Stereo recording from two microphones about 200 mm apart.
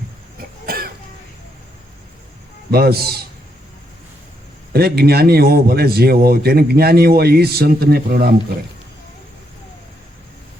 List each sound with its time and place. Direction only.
0.6 s cough: 50° right (ahead or behind)
2.7 s a man's voice: 50° right (ahead or behind)
4.7 s a man's voice: 50° right (ahead or behind)